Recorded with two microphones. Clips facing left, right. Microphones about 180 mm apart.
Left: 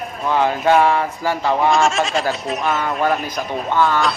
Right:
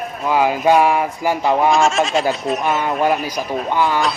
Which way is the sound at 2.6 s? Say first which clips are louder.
Right 2 dB; 20° right (ahead or behind).